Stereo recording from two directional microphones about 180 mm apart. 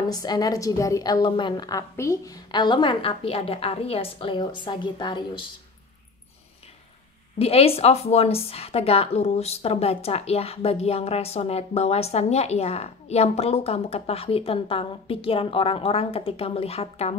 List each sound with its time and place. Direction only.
0.1 s a woman's voice: 20° left (ahead or behind)
7.3 s a woman's voice: 35° left (ahead or behind)